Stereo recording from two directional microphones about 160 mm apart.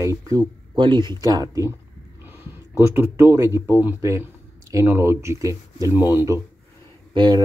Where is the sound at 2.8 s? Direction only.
15° right (ahead or behind).